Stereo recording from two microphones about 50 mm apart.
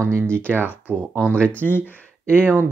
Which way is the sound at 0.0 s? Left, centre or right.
Right.